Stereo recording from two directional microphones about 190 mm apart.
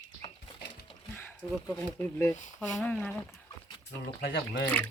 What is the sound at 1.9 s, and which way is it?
Speech, 15° left (ahead or behind).